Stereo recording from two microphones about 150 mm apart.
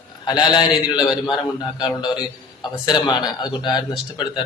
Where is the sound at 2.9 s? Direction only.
30° left (ahead or behind).